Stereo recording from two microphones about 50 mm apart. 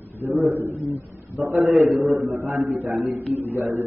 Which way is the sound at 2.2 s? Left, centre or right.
Right.